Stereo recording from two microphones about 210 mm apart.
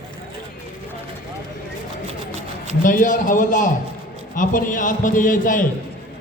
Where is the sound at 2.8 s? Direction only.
40° left (ahead or behind).